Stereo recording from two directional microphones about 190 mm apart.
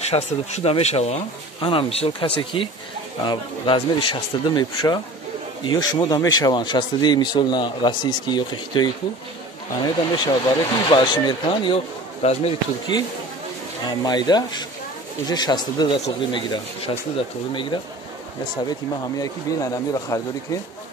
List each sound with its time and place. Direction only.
0.1 s speech: 35° left (ahead or behind)
18.7 s speech: 20° left (ahead or behind)